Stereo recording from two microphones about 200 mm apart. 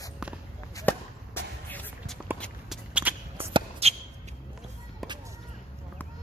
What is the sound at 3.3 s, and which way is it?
Shuffle, 30° right (ahead or behind).